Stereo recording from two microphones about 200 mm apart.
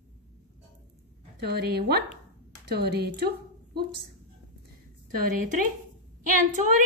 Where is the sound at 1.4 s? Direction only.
55° right (ahead or behind).